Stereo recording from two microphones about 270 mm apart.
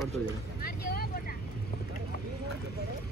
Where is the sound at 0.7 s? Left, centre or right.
Left.